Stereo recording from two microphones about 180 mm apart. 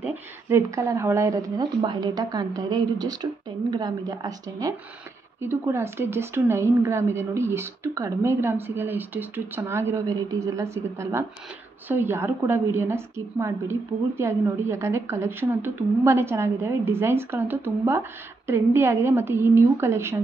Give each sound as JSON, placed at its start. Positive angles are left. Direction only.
{"t": 0.0, "sound": "a woman's voice", "side_deg": -15}